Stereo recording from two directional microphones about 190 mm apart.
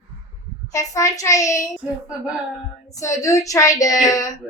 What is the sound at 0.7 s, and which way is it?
Speech, 15° left (ahead or behind).